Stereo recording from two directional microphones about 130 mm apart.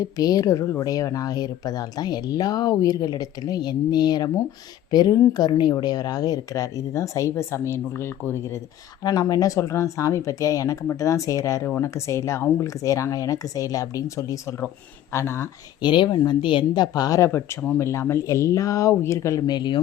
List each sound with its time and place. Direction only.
0.0 s speech: 30° left (ahead or behind)
9.0 s speech: 30° left (ahead or behind)
15.8 s speech: 35° left (ahead or behind)